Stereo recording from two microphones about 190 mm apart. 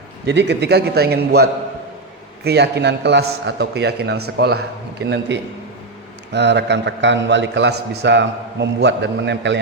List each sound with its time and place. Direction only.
0.3 s a man's voice: 65° right (ahead or behind)